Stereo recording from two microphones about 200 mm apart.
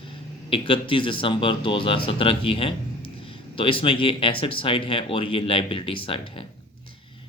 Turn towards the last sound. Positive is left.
turn(degrees=25)  # may be behind; listen again after turning